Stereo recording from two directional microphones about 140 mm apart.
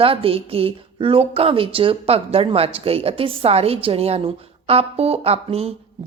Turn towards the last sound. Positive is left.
turn(degrees=-45)  # may be behind; listen again after turning